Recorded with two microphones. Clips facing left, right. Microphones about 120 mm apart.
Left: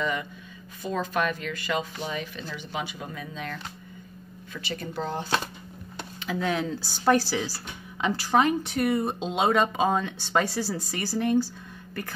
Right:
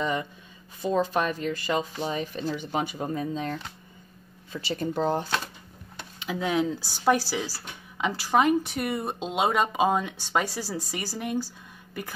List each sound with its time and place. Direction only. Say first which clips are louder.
0.0 s speech: right 1 dB; 30° right (ahead or behind)
6.1 s speech: right 1 dB; 15° right (ahead or behind)